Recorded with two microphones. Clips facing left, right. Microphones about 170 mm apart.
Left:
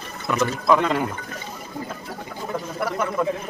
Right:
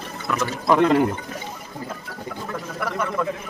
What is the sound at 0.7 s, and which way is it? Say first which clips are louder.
Speech: right 4 dB; 50° right (ahead or behind).